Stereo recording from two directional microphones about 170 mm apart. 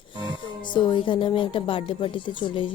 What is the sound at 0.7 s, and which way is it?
Speech, 25° left (ahead or behind).